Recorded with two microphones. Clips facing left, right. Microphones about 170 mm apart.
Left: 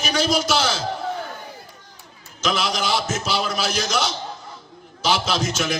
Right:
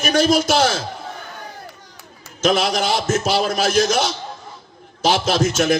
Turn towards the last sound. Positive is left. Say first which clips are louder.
# right 6 dB
turn(degrees=-50)  # may be behind; listen again after turning